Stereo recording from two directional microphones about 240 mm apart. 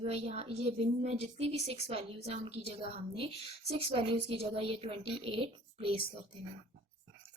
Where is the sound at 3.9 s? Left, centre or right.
Right.